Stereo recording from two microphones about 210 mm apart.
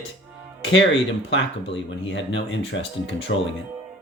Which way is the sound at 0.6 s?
60° left (ahead or behind).